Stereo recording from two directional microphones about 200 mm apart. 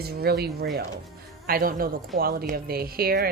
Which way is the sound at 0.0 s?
50° right (ahead or behind).